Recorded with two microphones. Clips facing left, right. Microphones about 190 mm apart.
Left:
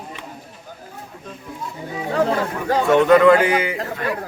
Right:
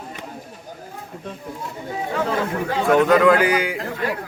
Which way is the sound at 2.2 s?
40° left (ahead or behind).